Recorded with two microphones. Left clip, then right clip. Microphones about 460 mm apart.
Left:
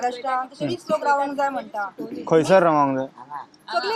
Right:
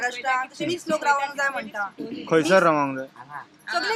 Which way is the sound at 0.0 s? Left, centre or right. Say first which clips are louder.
Even; right.